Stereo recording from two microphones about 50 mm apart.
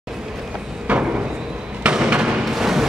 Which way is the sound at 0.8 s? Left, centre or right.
Right.